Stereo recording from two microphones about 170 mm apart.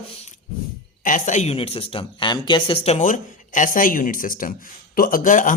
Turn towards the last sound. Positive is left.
turn(degrees=50)  # may be behind; listen again after turning